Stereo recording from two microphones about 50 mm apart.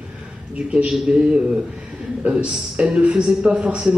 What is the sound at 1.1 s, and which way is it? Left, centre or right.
Speech, right.